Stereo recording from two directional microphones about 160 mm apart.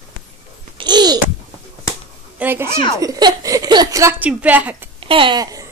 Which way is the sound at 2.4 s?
10° right (ahead or behind).